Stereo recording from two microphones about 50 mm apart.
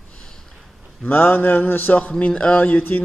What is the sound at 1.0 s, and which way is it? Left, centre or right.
Speech, left.